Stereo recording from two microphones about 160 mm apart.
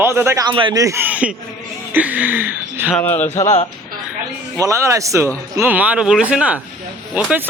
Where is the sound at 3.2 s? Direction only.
45° left (ahead or behind).